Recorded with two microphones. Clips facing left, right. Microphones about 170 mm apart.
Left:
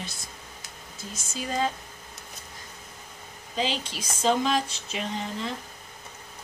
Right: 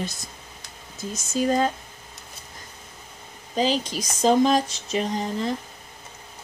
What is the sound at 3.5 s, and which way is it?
Speech, 40° right (ahead or behind).